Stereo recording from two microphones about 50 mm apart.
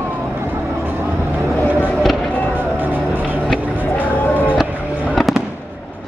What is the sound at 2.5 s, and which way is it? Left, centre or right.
Music, right.